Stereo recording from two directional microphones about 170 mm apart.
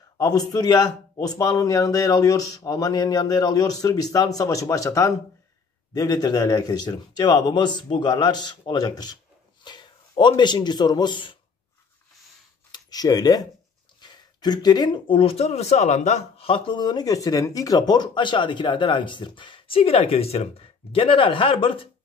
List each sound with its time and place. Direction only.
0.2 s a man's voice: 20° left (ahead or behind)
12.7 s speech: 25° left (ahead or behind)